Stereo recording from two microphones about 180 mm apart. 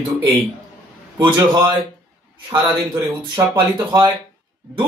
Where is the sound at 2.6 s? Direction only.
10° right (ahead or behind).